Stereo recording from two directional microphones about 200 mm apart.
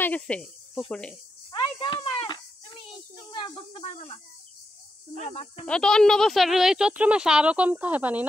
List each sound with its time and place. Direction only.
0.0 s speech: 5° left (ahead or behind)
1.5 s a sound: 25° left (ahead or behind)
3.3 s snake: 25° left (ahead or behind)
5.2 s speech: 30° left (ahead or behind)
5.7 s speech: 5° left (ahead or behind)